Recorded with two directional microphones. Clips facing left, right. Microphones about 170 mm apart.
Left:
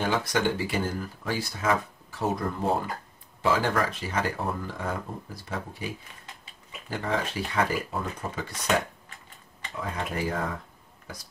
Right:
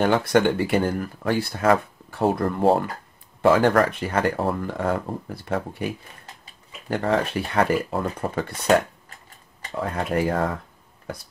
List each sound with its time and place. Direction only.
0.0 s speech: 60° right (ahead or behind)
3.4 s speech: 60° right (ahead or behind)